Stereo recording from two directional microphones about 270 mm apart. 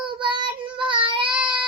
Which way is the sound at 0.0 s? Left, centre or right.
Centre.